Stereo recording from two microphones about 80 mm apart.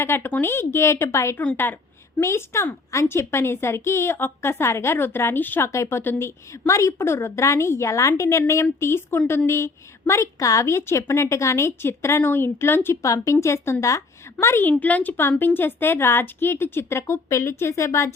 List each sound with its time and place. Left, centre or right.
0.0 s a woman's voice: left
1.5 s a sound: left
2.2 s a woman's voice: left